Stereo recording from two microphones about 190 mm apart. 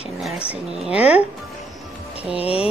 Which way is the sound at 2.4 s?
30° left (ahead or behind).